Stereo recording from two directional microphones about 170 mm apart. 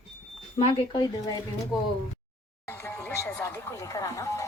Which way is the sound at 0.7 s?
25° left (ahead or behind).